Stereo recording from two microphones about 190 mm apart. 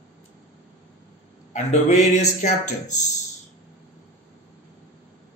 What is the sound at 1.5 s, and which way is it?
Speech, 35° left (ahead or behind).